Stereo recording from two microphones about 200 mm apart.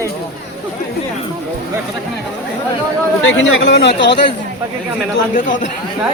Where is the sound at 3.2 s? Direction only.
70° left (ahead or behind).